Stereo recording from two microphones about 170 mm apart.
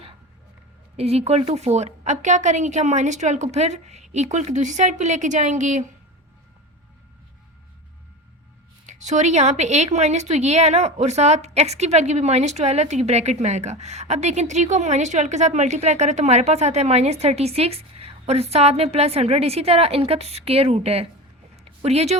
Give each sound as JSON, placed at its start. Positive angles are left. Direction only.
{"t": 0.9, "sound": "a woman's voice", "side_deg": -35}
{"t": 8.9, "sound": "a woman's voice", "side_deg": -45}
{"t": 21.5, "sound": "a sound", "side_deg": -40}